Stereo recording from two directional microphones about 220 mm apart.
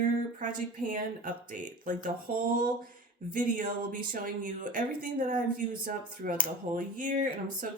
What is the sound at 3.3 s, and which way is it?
Speech, 40° right (ahead or behind).